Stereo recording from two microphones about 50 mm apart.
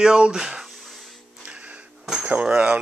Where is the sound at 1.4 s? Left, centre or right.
Right.